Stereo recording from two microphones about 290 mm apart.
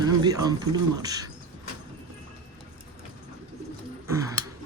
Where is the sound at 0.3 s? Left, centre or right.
Centre.